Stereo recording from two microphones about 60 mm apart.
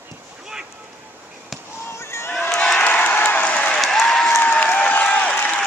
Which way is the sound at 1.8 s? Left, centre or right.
Left.